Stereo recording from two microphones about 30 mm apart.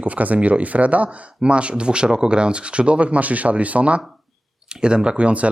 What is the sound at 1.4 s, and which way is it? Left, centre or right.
Speech, right.